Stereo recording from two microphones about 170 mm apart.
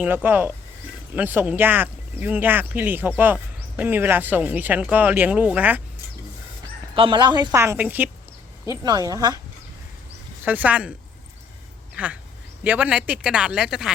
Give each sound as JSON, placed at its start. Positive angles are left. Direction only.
{"t": 0.0, "sound": "speech", "side_deg": -10}
{"t": 6.9, "sound": "a woman's voice", "side_deg": -30}
{"t": 8.6, "sound": "a woman's voice", "side_deg": -20}
{"t": 10.4, "sound": "speech", "side_deg": -10}
{"t": 12.0, "sound": "speech", "side_deg": -10}